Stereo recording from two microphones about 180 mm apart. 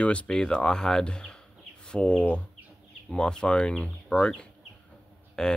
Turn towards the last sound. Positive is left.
turn(degrees=5)  # may be behind; listen again after turning